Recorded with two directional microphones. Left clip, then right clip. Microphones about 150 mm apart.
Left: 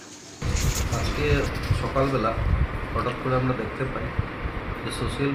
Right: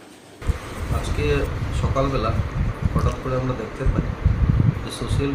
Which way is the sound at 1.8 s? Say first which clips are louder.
Right 1 dB; 20° right (ahead or behind).